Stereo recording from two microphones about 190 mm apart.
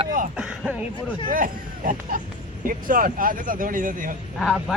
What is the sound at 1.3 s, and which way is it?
Speech, 45° right (ahead or behind).